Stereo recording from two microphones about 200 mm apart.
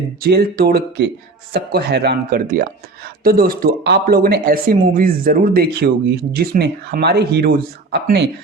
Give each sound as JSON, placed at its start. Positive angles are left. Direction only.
{"t": 0.2, "sound": "speech", "side_deg": -50}